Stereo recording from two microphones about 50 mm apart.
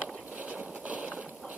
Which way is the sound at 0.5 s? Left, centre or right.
Right.